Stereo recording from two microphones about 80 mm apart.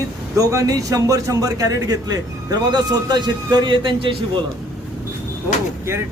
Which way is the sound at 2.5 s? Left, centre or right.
Right.